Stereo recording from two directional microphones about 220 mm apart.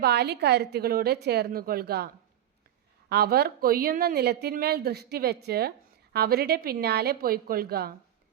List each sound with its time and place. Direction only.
0.0 s a woman's voice: 50° right (ahead or behind)
3.1 s a woman's voice: 45° right (ahead or behind)